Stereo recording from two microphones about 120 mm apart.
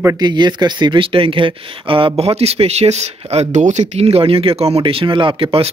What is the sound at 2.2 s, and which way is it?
Speech, 60° right (ahead or behind).